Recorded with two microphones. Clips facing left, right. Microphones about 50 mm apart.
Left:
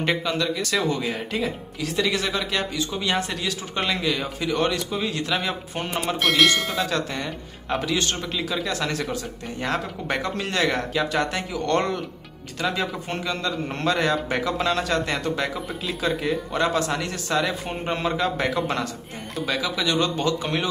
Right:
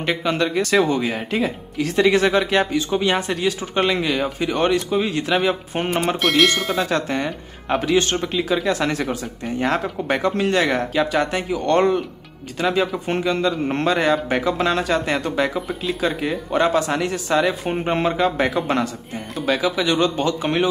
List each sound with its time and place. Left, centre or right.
0.2 s speech: right
1.0 s speech: centre
1.8 s speech: right
6.2 s speech: centre
6.9 s speech: right
7.2 s speech: centre
7.9 s speech: right
8.2 s speech: centre
16.6 s speech: centre
17.6 s speech: right